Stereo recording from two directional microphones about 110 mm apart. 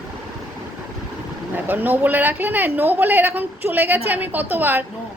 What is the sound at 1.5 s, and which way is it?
Speech, 15° right (ahead or behind).